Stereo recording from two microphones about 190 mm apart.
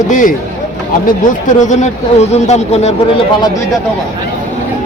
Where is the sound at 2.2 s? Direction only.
35° left (ahead or behind).